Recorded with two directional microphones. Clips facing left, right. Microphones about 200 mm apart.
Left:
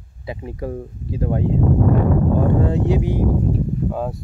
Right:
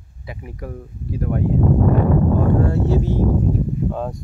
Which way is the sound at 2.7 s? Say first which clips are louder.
Even; 15° left (ahead or behind).